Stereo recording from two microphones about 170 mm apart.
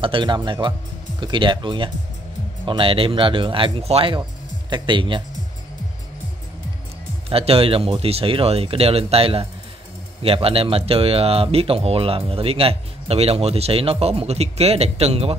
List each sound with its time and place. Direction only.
0.0 s speech: 30° right (ahead or behind)
7.2 s speech: 35° right (ahead or behind)